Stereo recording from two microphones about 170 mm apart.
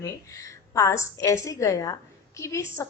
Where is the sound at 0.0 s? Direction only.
20° left (ahead or behind).